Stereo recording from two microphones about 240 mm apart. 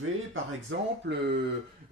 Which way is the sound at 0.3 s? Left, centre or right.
Right.